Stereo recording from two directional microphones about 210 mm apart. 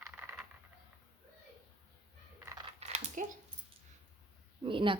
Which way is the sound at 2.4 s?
15° right (ahead or behind).